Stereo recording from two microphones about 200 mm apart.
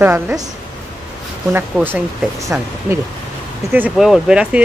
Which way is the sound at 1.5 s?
10° right (ahead or behind).